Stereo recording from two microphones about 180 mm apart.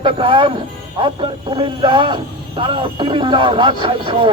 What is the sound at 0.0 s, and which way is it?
Speech, 30° right (ahead or behind).